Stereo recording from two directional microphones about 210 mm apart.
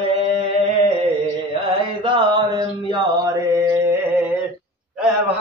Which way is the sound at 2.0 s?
20° right (ahead or behind).